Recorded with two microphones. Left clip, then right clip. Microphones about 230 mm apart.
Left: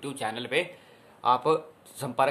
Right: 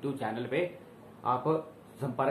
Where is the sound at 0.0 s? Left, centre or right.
Left.